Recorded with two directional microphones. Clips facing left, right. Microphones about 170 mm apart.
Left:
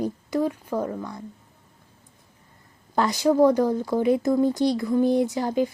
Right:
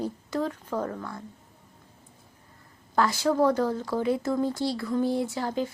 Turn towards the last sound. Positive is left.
turn(degrees=15)  # may be behind; listen again after turning